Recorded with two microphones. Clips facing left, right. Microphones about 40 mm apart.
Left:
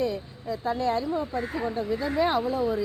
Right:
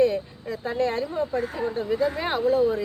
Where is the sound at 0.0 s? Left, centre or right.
Right.